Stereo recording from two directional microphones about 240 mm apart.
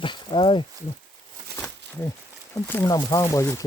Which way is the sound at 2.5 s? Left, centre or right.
Centre.